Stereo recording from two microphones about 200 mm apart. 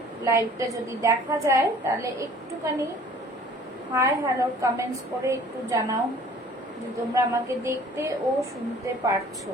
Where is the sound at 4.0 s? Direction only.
15° right (ahead or behind).